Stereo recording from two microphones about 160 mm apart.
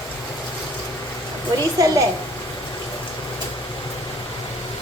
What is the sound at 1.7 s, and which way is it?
Speech, 20° right (ahead or behind).